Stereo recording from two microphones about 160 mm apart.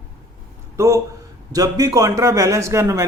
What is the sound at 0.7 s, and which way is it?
A man's voice, 20° right (ahead or behind).